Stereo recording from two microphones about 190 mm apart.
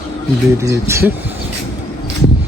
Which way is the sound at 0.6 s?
15° right (ahead or behind).